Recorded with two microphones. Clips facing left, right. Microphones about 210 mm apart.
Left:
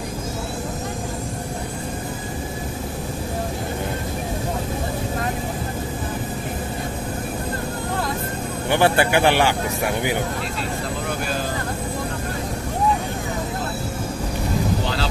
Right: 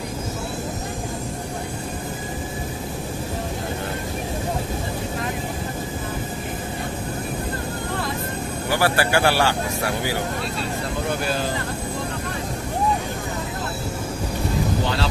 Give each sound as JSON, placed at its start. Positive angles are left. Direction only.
{"t": 8.6, "sound": "speech", "side_deg": 20}